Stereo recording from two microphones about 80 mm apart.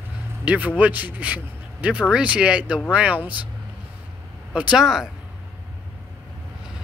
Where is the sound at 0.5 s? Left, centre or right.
Centre.